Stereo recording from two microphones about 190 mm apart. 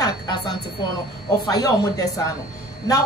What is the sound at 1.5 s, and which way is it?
Speech, 20° left (ahead or behind).